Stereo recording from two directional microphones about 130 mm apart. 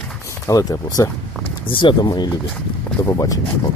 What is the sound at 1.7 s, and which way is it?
Speech, 35° left (ahead or behind).